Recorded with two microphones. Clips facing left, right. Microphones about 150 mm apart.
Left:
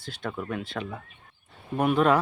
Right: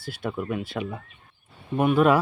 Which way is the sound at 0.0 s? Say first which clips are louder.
Right 3 dB; 10° right (ahead or behind).